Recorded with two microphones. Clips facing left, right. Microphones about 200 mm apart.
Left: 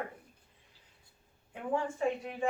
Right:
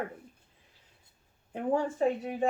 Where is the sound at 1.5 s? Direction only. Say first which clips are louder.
Right 5 dB; 40° right (ahead or behind).